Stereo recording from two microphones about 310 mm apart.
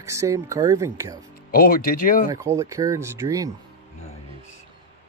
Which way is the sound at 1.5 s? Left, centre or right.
Left.